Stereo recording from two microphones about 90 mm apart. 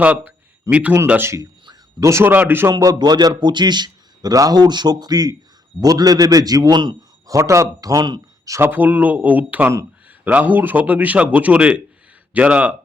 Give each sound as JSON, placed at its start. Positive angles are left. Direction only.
{"t": 0.0, "sound": "a man's voice", "side_deg": -15}
{"t": 2.0, "sound": "speech", "side_deg": -30}
{"t": 2.7, "sound": "a man's voice", "side_deg": -45}
{"t": 7.3, "sound": "speech", "side_deg": -35}
{"t": 8.4, "sound": "speech", "side_deg": -35}
{"t": 8.7, "sound": "a man's voice", "side_deg": -20}